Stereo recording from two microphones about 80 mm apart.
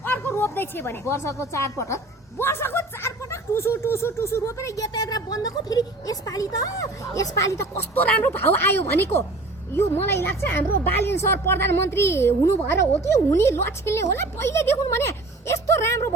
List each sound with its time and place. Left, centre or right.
0.3 s a sound: left
0.9 s speech: left
7.8 s speech: left